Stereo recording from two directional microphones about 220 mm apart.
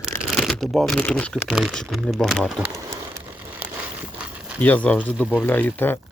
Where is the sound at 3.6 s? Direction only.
5° right (ahead or behind).